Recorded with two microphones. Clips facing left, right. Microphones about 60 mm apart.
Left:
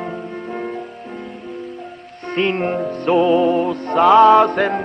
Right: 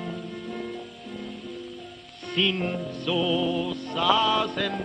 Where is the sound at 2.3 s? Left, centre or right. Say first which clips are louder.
Left 8 dB; left.